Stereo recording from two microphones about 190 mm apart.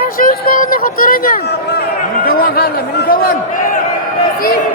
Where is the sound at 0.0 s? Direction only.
50° left (ahead or behind).